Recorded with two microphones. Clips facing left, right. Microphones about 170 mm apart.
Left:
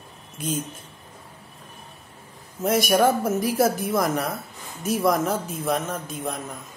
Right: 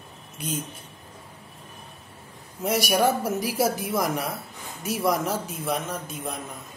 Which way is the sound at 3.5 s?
10° right (ahead or behind).